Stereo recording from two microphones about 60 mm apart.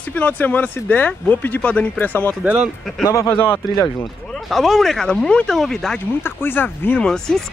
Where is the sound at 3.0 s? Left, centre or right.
Left.